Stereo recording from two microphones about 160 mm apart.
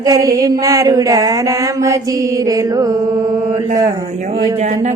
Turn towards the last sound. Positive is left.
turn(degrees=-45)  # may be behind; listen again after turning